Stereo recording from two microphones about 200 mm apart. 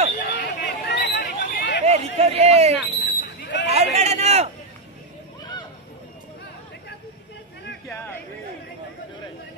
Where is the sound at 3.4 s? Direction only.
60° left (ahead or behind).